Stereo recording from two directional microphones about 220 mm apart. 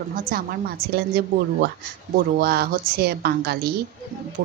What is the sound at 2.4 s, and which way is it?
Speech, 45° right (ahead or behind).